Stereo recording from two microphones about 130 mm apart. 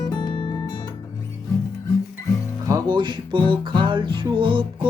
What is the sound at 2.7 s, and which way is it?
Music, 30° right (ahead or behind).